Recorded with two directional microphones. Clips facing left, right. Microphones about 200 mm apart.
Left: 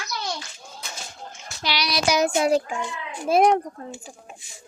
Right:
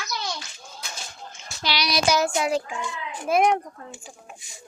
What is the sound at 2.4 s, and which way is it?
Speech, 40° left (ahead or behind).